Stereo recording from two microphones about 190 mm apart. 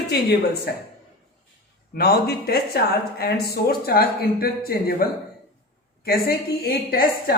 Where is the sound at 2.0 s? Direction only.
55° left (ahead or behind).